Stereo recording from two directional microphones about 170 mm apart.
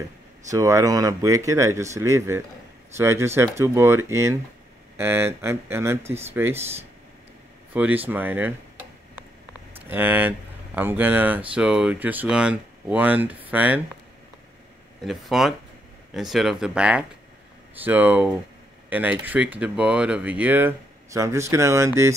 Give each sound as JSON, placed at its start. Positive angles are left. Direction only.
{"t": 0.5, "sound": "speech", "side_deg": -20}
{"t": 6.0, "sound": "speech", "side_deg": -40}
{"t": 6.3, "sound": "speech", "side_deg": -15}
{"t": 7.7, "sound": "speech", "side_deg": -10}
{"t": 9.8, "sound": "speech", "side_deg": -10}
{"t": 15.0, "sound": "speech", "side_deg": 0}